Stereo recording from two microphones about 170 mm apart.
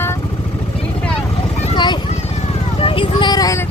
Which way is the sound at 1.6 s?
25° left (ahead or behind).